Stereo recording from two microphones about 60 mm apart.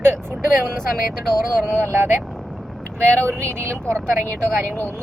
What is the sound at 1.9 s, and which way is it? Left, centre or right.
Speech, right.